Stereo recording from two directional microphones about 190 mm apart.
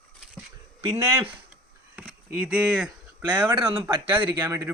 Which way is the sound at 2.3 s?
5° right (ahead or behind).